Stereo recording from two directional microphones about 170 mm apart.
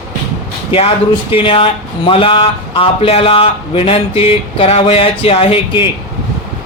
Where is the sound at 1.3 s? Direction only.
30° left (ahead or behind).